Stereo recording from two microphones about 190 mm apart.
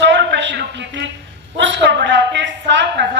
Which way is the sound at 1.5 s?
70° right (ahead or behind).